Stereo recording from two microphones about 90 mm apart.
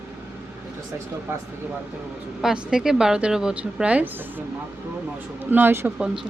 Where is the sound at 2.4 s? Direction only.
10° right (ahead or behind); by 5.9 s 25° right (ahead or behind).